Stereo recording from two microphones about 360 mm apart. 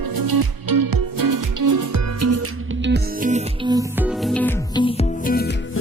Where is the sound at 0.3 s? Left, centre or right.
Right.